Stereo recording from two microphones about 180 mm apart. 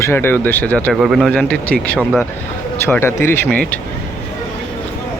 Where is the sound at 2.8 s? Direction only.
15° left (ahead or behind).